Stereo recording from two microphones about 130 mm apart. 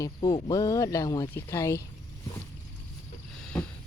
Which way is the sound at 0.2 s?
40° left (ahead or behind).